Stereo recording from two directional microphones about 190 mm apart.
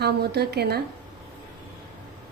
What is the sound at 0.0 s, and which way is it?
Speech, 60° right (ahead or behind).